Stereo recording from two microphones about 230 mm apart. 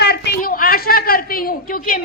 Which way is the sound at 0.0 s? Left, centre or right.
Left.